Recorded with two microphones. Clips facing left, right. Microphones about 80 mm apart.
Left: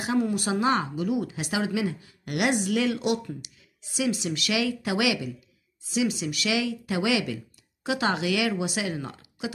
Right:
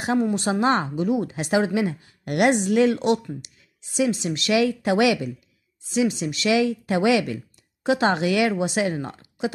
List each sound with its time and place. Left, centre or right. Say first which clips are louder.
0.2 s speech: right 3 dB; right